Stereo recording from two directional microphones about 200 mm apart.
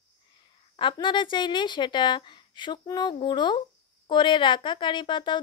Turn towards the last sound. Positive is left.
turn(degrees=25)  # may be behind; listen again after turning